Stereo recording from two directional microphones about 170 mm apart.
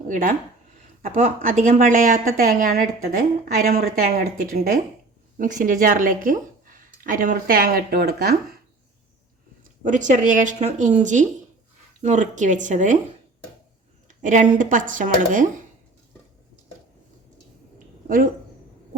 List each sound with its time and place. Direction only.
0.1 s a woman's voice: 55° right (ahead or behind)
9.8 s speech: 50° right (ahead or behind)
14.2 s speech: 50° right (ahead or behind)